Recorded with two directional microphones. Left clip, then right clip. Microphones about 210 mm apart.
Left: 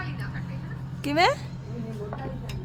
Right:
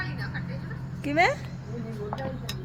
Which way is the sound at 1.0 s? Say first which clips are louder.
Left 1 dB; 20° left (ahead or behind).